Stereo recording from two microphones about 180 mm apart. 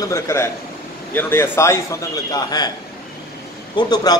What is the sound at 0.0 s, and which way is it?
A man's voice, 15° left (ahead or behind).